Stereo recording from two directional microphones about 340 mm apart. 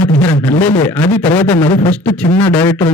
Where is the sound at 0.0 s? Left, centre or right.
Centre.